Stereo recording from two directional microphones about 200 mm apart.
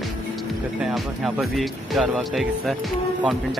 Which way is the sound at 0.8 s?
Centre (ahead or behind).